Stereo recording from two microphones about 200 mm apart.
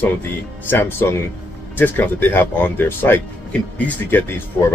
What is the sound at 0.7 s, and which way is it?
Speech, 10° left (ahead or behind).